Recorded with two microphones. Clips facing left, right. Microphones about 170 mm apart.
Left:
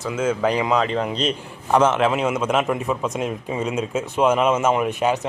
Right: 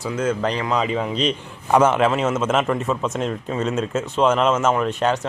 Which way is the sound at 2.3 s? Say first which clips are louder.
Right 1 dB; 10° left (ahead or behind).